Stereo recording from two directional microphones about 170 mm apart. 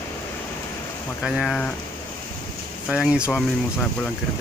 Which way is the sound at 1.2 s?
Centre (ahead or behind).